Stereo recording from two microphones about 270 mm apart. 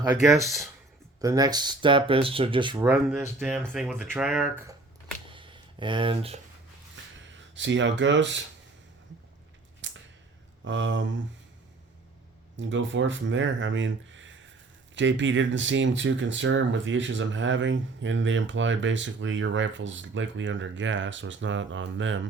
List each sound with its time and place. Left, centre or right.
0.0 s speech: centre
1.2 s speech: centre
5.3 s a sound: centre
7.5 s speech: right
9.8 s a sound: right
10.6 s speech: right
12.5 s speech: right